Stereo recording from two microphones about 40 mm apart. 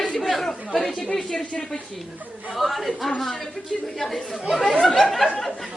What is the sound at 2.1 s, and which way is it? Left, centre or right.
Speech, right.